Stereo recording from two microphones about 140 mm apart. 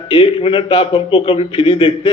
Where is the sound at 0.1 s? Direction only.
40° left (ahead or behind).